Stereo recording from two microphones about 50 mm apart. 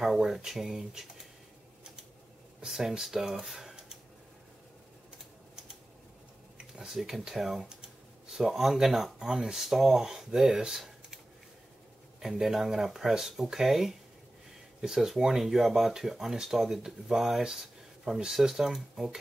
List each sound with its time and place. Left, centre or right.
0.0 s speech: centre
2.6 s speech: centre
6.6 s speech: centre
12.2 s speech: centre